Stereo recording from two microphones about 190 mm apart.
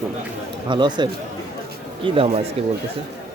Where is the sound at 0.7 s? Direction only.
25° right (ahead or behind).